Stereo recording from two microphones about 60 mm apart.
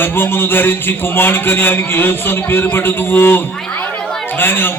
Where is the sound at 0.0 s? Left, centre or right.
Left.